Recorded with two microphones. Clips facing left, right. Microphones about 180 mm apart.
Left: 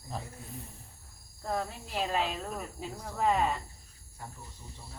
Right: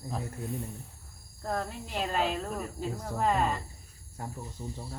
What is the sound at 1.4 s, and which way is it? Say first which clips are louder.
Speech: right 1 dB; centre (ahead or behind).